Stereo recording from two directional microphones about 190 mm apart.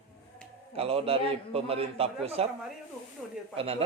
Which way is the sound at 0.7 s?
30° right (ahead or behind).